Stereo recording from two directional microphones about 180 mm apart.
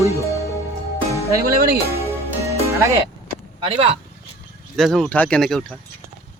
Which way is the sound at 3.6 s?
30° right (ahead or behind).